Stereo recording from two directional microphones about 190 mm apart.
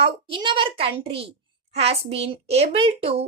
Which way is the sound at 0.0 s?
25° right (ahead or behind).